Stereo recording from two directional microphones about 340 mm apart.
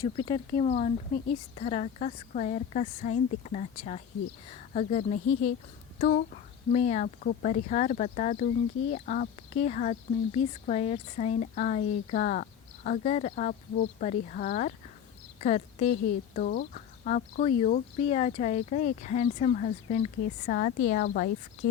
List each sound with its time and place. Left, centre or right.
0.3 s speech: centre